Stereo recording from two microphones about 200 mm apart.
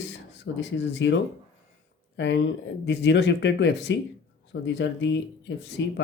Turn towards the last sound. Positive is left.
turn(degrees=60)  # may be behind; listen again after turning